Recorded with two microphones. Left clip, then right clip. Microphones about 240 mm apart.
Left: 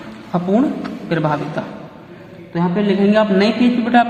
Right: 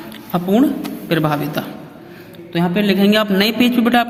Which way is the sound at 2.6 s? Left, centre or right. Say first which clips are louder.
Right 1 dB; right.